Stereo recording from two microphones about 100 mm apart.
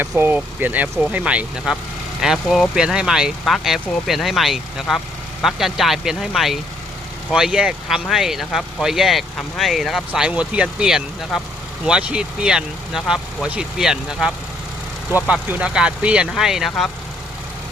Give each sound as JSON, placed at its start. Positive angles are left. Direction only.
{"t": 0.3, "sound": "speech", "side_deg": -15}
{"t": 15.1, "sound": "speech", "side_deg": -20}